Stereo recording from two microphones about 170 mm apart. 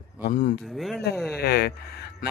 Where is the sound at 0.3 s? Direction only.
50° left (ahead or behind).